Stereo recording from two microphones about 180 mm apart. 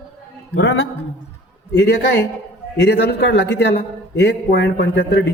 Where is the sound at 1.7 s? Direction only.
65° left (ahead or behind).